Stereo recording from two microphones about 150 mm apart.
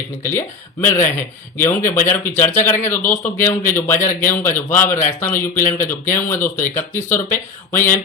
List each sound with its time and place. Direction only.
0.2 s speech: 15° left (ahead or behind)